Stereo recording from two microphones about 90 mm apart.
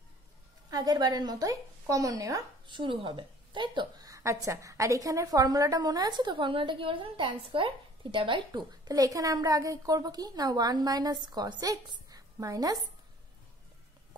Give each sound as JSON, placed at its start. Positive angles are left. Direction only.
{"t": 0.7, "sound": "a woman's voice", "side_deg": -50}
{"t": 2.6, "sound": "a woman's voice", "side_deg": -65}
{"t": 4.0, "sound": "a woman's voice", "side_deg": -35}
{"t": 8.8, "sound": "a woman's voice", "side_deg": -40}
{"t": 12.1, "sound": "a sound", "side_deg": -40}